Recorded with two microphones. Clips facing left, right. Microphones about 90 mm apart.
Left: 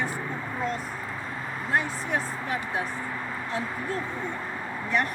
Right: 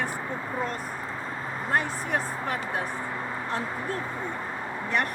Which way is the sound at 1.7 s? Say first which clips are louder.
Even; 50° right (ahead or behind).